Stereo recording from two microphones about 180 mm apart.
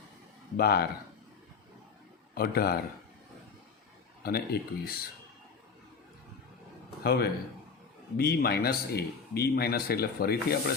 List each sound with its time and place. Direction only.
0.5 s speech: 60° left (ahead or behind)
2.3 s speech: 60° left (ahead or behind)
4.2 s speech: 60° left (ahead or behind)
7.0 s a man's voice: 60° left (ahead or behind)